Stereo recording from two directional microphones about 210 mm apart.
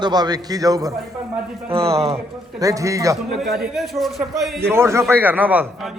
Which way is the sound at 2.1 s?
15° right (ahead or behind).